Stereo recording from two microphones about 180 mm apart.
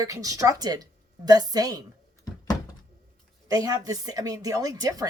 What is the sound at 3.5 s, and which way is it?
A woman's voice, 20° right (ahead or behind).